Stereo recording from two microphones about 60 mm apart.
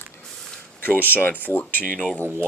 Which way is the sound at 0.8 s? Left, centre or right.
Left.